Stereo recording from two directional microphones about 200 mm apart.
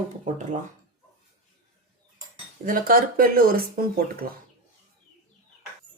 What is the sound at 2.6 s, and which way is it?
Speech, 45° right (ahead or behind).